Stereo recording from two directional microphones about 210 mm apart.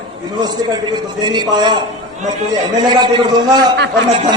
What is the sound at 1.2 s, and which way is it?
Speech, 20° right (ahead or behind).